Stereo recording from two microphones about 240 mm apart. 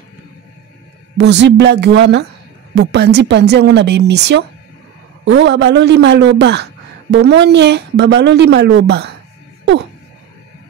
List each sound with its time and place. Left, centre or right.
1.1 s a man's voice: right